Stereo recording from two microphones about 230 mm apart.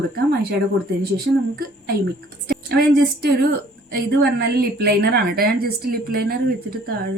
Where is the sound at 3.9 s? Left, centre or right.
Right.